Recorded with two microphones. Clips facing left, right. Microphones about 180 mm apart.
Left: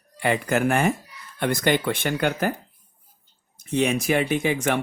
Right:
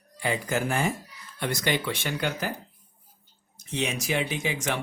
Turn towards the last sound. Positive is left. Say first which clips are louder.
# left 7 dB
turn(degrees=55)  # may be behind; listen again after turning